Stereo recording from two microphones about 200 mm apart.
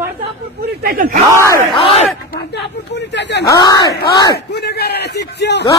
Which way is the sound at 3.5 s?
20° left (ahead or behind).